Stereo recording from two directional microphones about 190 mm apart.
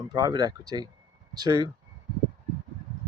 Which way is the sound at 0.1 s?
20° right (ahead or behind).